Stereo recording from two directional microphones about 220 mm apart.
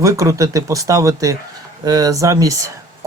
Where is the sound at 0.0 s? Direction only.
15° right (ahead or behind).